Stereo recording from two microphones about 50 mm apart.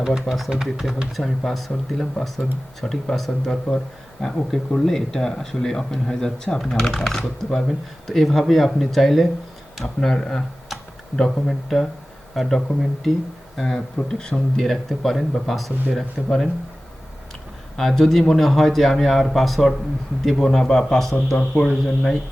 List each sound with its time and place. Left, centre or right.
0.0 s speech: centre
1.1 s speech: centre
14.2 s speech: centre
17.7 s speech: centre
21.3 s speech: centre